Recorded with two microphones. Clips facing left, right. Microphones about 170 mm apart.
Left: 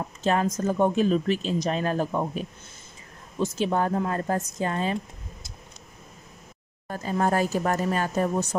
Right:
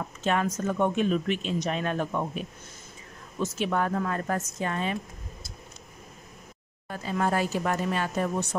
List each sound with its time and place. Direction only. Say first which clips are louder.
0.2 s speech: left 3 dB; 35° left (ahead or behind)
6.9 s speech: left 3 dB; 45° left (ahead or behind)